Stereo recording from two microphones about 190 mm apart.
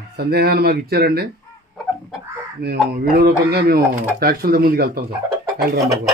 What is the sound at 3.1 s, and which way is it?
Speech, 50° right (ahead or behind).